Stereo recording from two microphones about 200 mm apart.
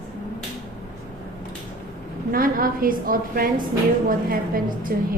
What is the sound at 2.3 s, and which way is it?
A woman's voice, 45° right (ahead or behind).